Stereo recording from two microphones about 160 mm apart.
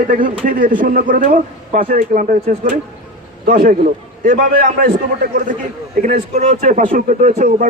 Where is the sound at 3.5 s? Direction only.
55° right (ahead or behind).